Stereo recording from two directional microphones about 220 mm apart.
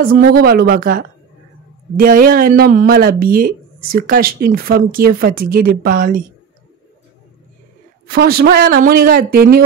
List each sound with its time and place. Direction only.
0.0 s speech: 45° right (ahead or behind)
8.1 s speech: 45° right (ahead or behind)